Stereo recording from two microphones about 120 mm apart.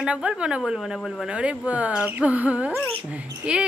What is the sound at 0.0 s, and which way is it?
Speech, 10° right (ahead or behind).